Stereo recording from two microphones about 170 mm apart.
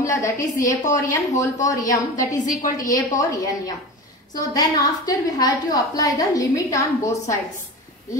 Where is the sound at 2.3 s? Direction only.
50° left (ahead or behind).